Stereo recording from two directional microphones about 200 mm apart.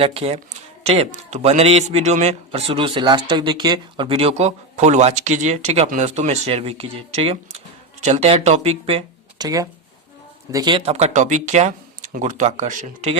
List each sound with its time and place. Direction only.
0.0 s a man's voice: 30° right (ahead or behind)
9.4 s a man's voice: 15° right (ahead or behind); by 13.1 s 40° right (ahead or behind)